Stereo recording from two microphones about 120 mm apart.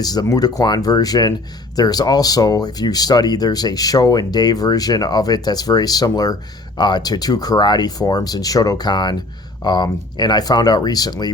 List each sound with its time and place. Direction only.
0.0 s speech: 35° left (ahead or behind)